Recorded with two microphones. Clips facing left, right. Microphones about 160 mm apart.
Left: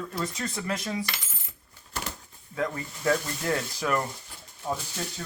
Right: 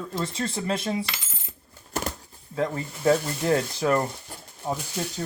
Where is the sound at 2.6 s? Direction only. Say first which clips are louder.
Right 3 dB; 30° right (ahead or behind).